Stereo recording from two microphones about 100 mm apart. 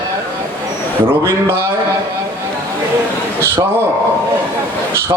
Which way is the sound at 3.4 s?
25° right (ahead or behind).